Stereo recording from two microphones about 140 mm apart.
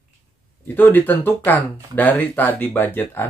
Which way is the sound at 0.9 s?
15° left (ahead or behind).